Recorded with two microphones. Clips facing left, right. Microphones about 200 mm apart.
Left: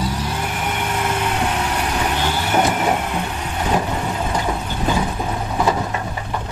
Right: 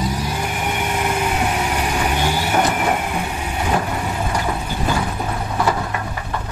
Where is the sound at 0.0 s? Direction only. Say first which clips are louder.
Right 1 dB; 10° right (ahead or behind).